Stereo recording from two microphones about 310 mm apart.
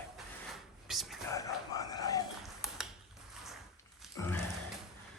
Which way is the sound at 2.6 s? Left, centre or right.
Centre.